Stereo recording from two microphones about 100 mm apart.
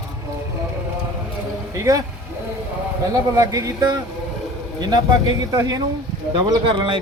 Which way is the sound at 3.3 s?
35° right (ahead or behind).